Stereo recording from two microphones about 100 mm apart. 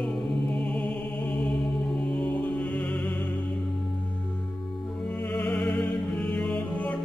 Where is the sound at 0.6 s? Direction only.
10° left (ahead or behind).